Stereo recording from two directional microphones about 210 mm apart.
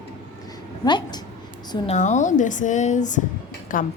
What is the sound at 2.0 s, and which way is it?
A woman's voice, 35° left (ahead or behind).